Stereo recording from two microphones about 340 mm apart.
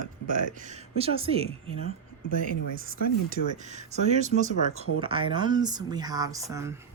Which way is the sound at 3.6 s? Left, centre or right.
Centre.